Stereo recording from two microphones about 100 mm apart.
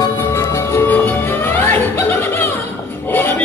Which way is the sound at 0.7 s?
20° left (ahead or behind).